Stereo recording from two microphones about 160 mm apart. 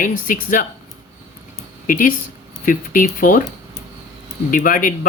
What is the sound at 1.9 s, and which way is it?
Speech, 55° left (ahead or behind).